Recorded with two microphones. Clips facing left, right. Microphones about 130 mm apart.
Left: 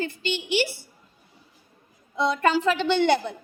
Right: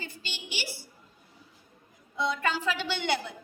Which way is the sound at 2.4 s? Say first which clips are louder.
Left 8 dB; 45° left (ahead or behind).